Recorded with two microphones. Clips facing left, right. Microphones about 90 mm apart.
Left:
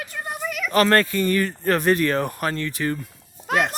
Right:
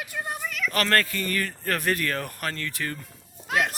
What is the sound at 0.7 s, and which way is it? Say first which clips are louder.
Speech: left 7 dB; 25° left (ahead or behind).